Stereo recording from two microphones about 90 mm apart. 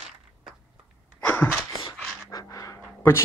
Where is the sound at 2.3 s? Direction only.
45° left (ahead or behind).